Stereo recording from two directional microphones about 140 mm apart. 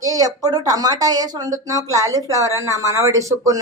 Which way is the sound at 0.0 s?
25° right (ahead or behind).